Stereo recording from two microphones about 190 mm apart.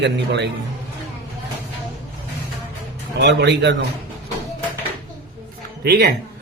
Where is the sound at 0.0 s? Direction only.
65° right (ahead or behind).